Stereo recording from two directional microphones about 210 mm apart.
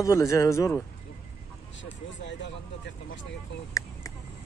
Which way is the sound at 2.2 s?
55° left (ahead or behind).